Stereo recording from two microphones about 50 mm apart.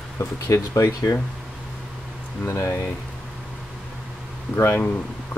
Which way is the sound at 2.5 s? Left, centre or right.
Left.